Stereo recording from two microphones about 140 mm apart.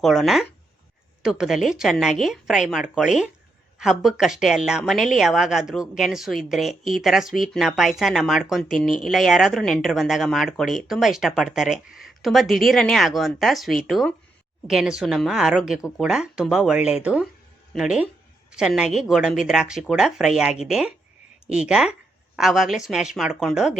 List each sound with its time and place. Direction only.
0.0 s speech: centre (ahead or behind)